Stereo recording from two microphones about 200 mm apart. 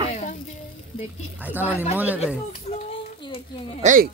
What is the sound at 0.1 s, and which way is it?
Sizzle, 35° left (ahead or behind).